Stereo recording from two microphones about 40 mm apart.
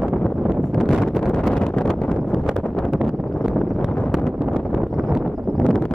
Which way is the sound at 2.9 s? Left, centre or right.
Centre.